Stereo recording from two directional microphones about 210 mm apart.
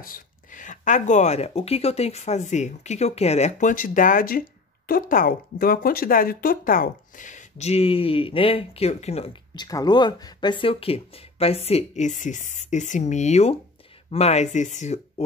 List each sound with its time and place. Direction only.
0.1 s speech: 40° left (ahead or behind)